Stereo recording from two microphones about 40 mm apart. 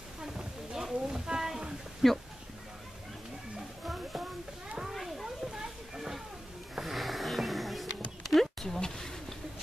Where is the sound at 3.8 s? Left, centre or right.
Centre.